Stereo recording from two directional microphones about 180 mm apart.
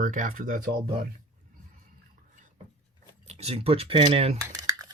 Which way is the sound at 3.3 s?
35° right (ahead or behind).